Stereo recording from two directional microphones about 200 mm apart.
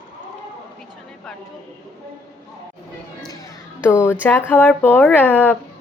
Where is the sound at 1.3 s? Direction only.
Centre (ahead or behind).